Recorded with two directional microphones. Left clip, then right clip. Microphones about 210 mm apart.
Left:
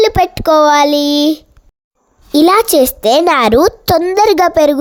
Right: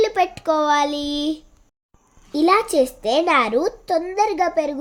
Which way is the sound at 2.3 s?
50° left (ahead or behind).